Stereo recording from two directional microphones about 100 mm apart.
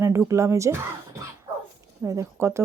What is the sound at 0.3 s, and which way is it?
Speech, 30° right (ahead or behind).